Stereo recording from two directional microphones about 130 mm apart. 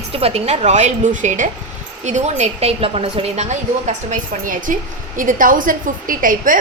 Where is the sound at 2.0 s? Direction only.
60° right (ahead or behind); by 6.5 s 90° right.